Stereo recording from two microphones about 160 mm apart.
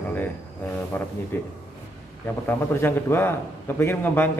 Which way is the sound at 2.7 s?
15° left (ahead or behind).